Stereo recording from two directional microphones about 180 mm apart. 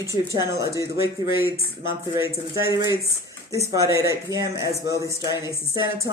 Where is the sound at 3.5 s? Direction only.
20° right (ahead or behind).